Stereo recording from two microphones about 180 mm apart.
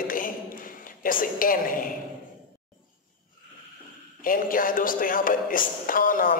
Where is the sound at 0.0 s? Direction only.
50° left (ahead or behind).